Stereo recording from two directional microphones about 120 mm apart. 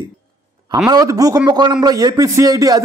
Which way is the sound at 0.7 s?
30° right (ahead or behind).